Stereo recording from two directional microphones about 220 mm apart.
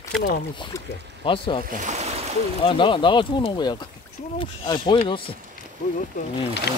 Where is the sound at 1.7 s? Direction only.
35° right (ahead or behind).